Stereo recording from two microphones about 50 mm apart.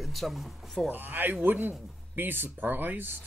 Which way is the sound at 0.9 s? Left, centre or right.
Right.